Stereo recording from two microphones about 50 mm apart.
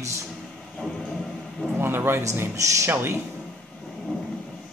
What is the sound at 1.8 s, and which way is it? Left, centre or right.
Speech, right.